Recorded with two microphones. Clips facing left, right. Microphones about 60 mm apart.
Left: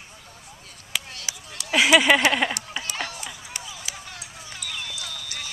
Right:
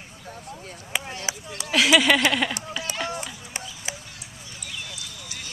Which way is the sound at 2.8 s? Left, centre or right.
Left.